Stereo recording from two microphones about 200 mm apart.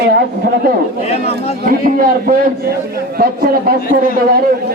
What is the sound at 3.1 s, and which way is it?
Speech, 50° right (ahead or behind).